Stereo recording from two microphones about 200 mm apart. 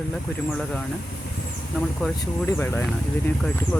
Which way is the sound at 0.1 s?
5° left (ahead or behind).